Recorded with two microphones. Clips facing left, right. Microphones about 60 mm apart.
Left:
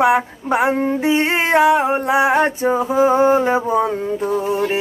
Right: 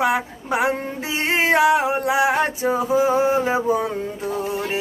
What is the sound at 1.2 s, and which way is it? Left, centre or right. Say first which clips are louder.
Mantra: left 3 dB; left.